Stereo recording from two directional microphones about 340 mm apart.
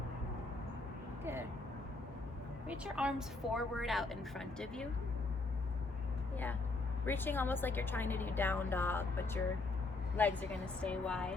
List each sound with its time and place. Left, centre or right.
1.2 s vehicle: centre
2.6 s a woman's voice: centre
6.3 s a woman's voice: centre